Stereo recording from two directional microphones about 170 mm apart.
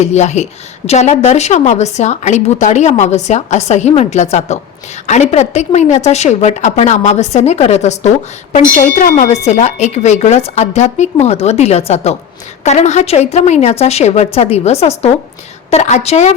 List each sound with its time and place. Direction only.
0.0 s a woman's voice: 40° left (ahead or behind)